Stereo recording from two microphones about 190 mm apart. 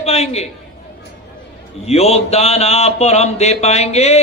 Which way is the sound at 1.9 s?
35° left (ahead or behind).